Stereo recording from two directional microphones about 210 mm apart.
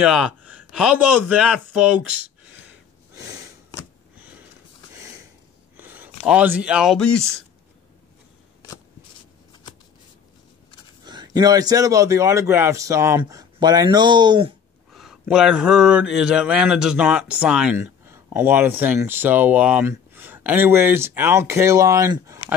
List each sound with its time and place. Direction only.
0.0 s speech: centre (ahead or behind)
3.2 s sniff: 15° right (ahead or behind)
5.8 s speech: 10° right (ahead or behind)
9.5 s shuffling cards: 20° left (ahead or behind)
11.1 s speech: 20° right (ahead or behind)
14.9 s speech: centre (ahead or behind)